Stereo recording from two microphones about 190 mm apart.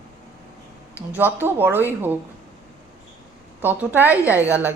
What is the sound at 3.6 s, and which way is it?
A woman's voice, 10° right (ahead or behind).